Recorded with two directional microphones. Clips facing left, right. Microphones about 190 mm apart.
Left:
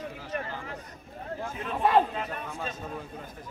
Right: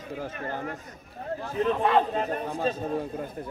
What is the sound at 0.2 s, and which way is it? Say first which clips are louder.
Speech: right 5 dB; 50° right (ahead or behind).